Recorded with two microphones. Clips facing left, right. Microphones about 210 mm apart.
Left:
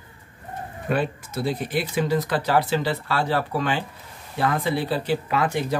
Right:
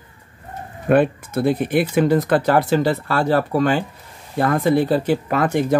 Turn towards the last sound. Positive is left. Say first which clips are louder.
# right 6 dB
turn(degrees=-50)  # may be behind; listen again after turning